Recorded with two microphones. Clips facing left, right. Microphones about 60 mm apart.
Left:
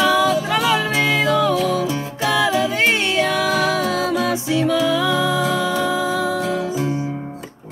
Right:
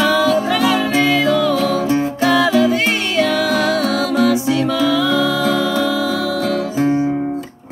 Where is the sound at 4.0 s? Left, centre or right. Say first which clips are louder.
Right 4 dB; left.